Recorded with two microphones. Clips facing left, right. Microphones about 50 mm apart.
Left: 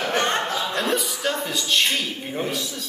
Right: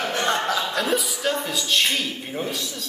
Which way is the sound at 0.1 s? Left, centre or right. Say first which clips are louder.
Left 2 dB; left.